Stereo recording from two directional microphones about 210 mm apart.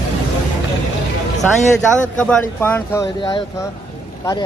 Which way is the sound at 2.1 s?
5° left (ahead or behind).